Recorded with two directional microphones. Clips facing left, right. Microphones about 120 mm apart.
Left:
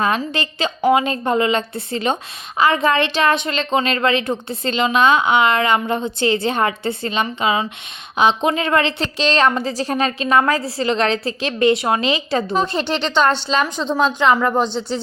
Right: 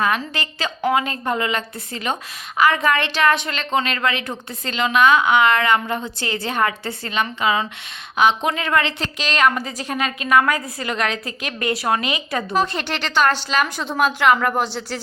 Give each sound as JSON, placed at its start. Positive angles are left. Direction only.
{"t": 0.3, "sound": "a woman's voice", "side_deg": 20}
{"t": 13.7, "sound": "a woman's voice", "side_deg": -10}